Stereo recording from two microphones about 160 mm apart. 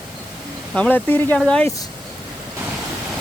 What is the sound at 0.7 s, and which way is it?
Speech, 10° left (ahead or behind).